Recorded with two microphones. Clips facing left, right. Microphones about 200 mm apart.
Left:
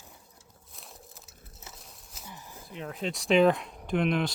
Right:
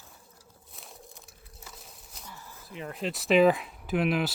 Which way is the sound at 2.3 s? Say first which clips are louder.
Left 2 dB; 20° left (ahead or behind).